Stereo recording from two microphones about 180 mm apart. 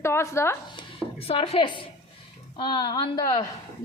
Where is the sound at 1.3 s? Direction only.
35° left (ahead or behind).